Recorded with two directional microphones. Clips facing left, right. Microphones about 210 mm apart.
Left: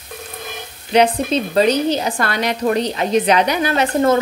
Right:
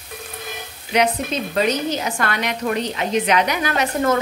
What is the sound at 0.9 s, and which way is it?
A woman's voice, 30° left (ahead or behind).